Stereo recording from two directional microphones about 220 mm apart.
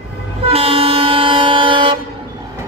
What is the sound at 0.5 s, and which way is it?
Train, 25° right (ahead or behind).